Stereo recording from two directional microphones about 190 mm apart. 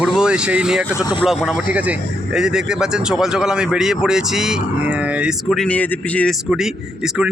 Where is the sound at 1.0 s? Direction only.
20° left (ahead or behind).